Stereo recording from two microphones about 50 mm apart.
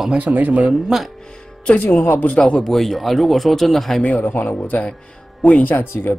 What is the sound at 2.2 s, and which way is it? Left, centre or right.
Speech, centre.